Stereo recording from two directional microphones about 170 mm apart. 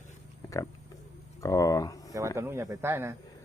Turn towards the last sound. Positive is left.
turn(degrees=-15)  # may be behind; listen again after turning